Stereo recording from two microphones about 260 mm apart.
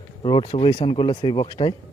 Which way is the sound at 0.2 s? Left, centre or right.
Centre.